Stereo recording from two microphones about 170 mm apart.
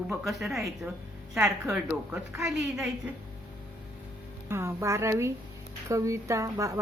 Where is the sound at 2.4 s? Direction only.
Centre (ahead or behind).